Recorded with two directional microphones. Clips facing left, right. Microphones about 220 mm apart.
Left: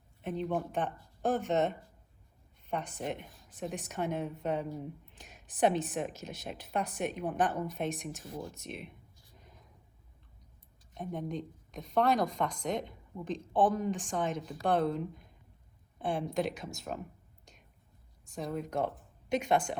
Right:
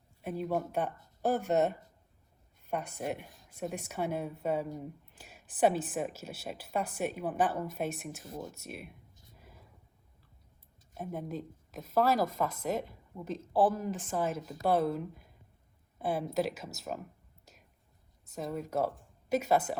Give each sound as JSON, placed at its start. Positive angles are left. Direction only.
{"t": 0.3, "sound": "a woman's voice", "side_deg": -10}
{"t": 8.3, "sound": "speech", "side_deg": -20}
{"t": 8.5, "sound": "a woman's voice", "side_deg": -5}
{"t": 9.3, "sound": "a sound", "side_deg": -5}
{"t": 10.9, "sound": "speech", "side_deg": -5}